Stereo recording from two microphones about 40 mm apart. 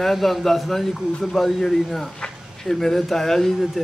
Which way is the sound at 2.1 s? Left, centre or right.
Centre.